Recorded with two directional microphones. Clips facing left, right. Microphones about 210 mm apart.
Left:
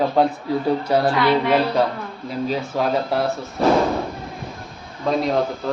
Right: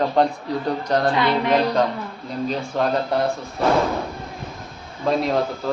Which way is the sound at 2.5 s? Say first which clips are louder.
Even; 5° left (ahead or behind).